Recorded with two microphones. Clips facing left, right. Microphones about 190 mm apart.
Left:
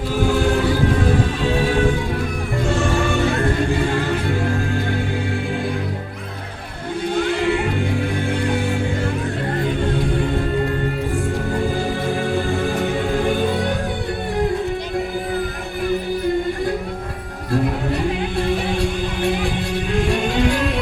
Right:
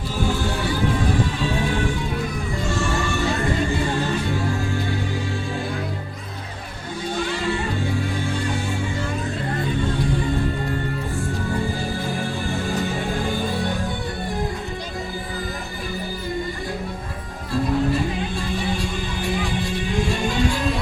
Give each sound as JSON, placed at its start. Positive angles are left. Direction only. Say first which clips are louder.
{"t": 2.6, "sound": "music", "louder": "left 5 dB", "side_deg": 60}
{"t": 7.3, "sound": "music", "louder": "left 6 dB", "side_deg": 60}
{"t": 12.8, "sound": "music", "louder": "left 5 dB", "side_deg": 60}
{"t": 18.3, "sound": "music", "louder": "left 5 dB", "side_deg": 65}